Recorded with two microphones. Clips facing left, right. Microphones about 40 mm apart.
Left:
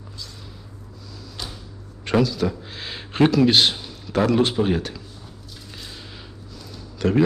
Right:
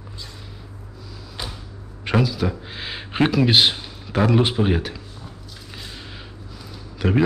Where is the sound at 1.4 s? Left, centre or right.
Centre.